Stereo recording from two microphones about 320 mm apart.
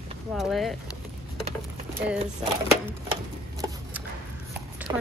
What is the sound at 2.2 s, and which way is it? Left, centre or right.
Speech, centre.